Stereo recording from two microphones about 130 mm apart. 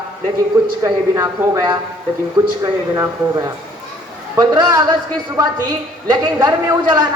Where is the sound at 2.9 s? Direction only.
25° right (ahead or behind).